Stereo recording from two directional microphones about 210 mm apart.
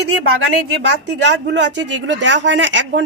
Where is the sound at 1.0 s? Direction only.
55° right (ahead or behind).